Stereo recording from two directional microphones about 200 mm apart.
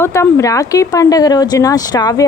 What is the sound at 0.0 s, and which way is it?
Speech, 15° left (ahead or behind).